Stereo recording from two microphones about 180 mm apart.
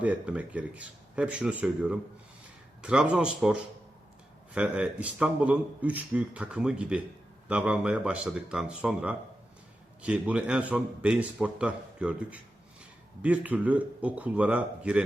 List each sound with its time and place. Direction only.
0.0 s speech: 10° right (ahead or behind)